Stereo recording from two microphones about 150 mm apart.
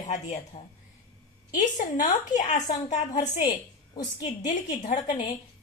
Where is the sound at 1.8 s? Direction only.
55° left (ahead or behind).